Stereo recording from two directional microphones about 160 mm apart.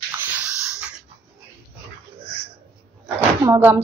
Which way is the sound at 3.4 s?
15° right (ahead or behind).